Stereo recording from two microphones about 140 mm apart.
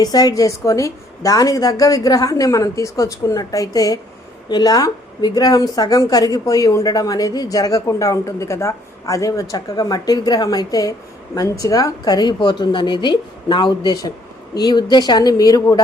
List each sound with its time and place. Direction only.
0.0 s a woman's voice: 30° left (ahead or behind)